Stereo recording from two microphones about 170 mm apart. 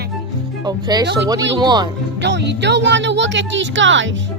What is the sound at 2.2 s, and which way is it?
Speech, 90° right.